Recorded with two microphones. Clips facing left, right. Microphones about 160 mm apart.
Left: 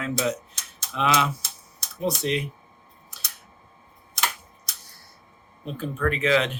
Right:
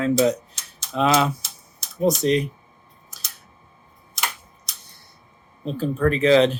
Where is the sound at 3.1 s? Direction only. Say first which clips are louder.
Left 1 dB; 40° right (ahead or behind).